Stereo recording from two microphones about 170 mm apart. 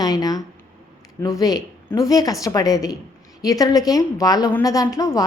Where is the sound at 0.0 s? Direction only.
20° left (ahead or behind).